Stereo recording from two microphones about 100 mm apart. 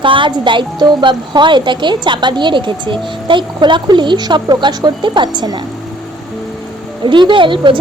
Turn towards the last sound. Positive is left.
turn(degrees=-55)  # may be behind; listen again after turning